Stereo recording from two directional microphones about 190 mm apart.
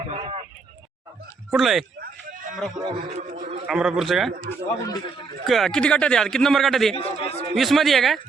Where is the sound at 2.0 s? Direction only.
45° right (ahead or behind).